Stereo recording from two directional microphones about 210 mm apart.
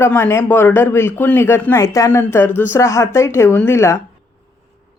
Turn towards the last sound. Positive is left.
turn(degrees=15)  # may be behind; listen again after turning